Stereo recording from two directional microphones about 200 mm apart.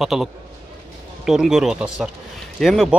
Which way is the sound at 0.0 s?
Centre (ahead or behind).